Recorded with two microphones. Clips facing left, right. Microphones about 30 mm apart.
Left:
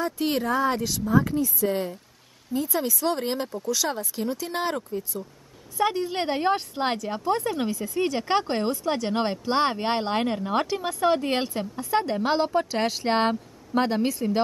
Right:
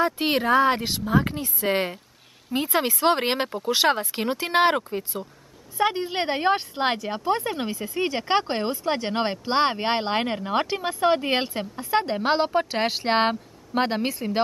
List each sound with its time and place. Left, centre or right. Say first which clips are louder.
0.0 s speech: right 3 dB; right
5.8 s speech: right 1 dB; right